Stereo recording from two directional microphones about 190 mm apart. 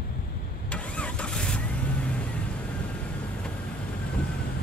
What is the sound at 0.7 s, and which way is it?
Vehicle, 5° left (ahead or behind).